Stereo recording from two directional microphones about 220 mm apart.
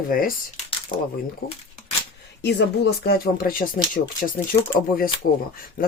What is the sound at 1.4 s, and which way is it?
Speech, 40° left (ahead or behind).